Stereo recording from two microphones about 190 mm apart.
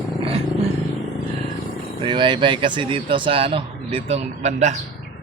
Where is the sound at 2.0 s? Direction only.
25° right (ahead or behind).